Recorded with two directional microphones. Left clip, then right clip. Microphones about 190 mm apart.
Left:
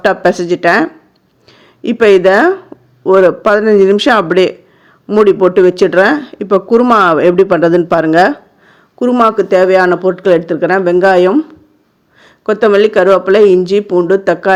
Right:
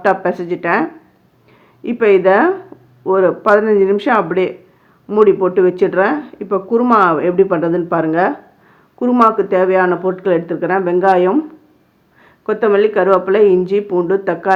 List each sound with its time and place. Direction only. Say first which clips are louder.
0.0 s speech: left 4 dB; 45° left (ahead or behind)